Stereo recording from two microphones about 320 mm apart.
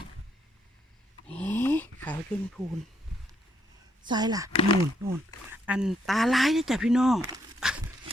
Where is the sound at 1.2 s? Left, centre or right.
Centre.